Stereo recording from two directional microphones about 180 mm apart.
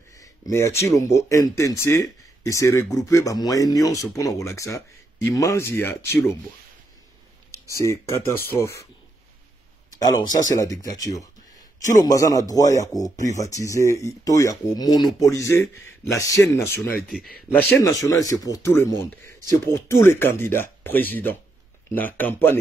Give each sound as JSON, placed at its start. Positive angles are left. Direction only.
{"t": 0.1, "sound": "speech", "side_deg": 15}
{"t": 7.7, "sound": "speech", "side_deg": 15}
{"t": 10.0, "sound": "speech", "side_deg": 20}
{"t": 17.5, "sound": "speech", "side_deg": 0}
{"t": 17.8, "sound": "speech", "side_deg": 20}